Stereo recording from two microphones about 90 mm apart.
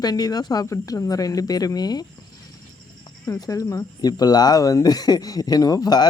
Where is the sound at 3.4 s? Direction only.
40° left (ahead or behind).